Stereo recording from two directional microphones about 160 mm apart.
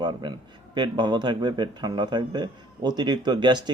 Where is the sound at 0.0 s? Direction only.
30° right (ahead or behind).